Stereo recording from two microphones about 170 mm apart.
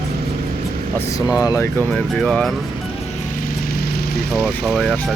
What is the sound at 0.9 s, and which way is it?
Speech, 15° left (ahead or behind).